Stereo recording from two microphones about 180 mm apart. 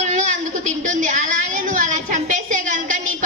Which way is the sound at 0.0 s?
40° right (ahead or behind).